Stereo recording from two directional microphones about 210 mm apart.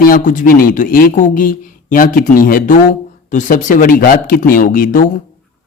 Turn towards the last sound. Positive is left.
turn(degrees=40)  # may be behind; listen again after turning